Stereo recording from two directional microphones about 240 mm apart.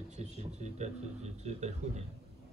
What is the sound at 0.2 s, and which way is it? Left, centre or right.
Speech, right.